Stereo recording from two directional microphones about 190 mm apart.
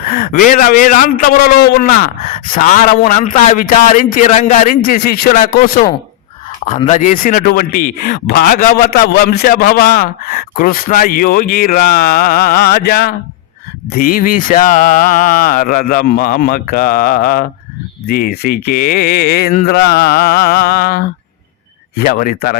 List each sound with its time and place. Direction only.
0.0 s speech: 50° left (ahead or behind)
6.7 s speech: 35° left (ahead or behind)